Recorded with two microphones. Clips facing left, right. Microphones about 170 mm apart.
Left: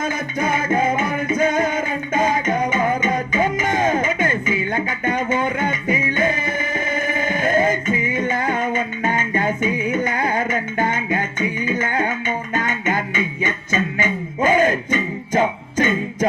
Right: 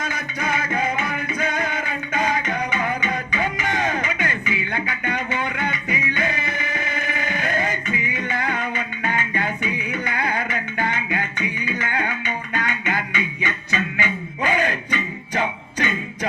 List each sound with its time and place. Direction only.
0.0 s music: 45° left (ahead or behind)